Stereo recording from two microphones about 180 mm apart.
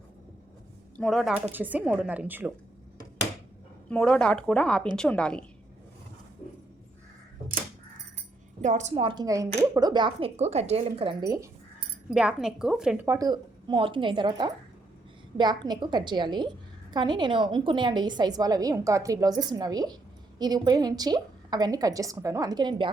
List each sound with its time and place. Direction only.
0.9 s a woman's voice: centre (ahead or behind)
1.5 s a woman's voice: 10° right (ahead or behind)
3.8 s a woman's voice: 5° left (ahead or behind)
8.6 s a woman's voice: 40° right (ahead or behind); by 11.4 s 20° right (ahead or behind)
12.1 s a woman's voice: 5° right (ahead or behind)
13.1 s a woman's voice: 20° right (ahead or behind)